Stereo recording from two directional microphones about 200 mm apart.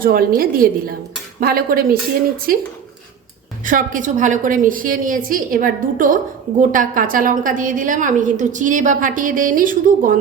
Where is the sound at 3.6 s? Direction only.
40° right (ahead or behind).